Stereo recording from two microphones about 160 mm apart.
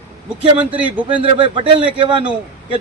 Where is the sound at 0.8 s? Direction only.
10° right (ahead or behind).